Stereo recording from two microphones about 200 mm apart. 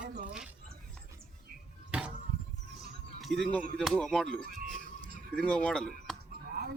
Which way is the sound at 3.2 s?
Centre (ahead or behind).